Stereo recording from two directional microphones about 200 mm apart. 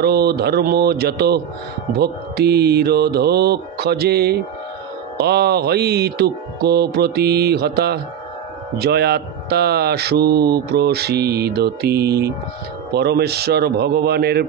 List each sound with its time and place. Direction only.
0.0 s speech: 55° right (ahead or behind)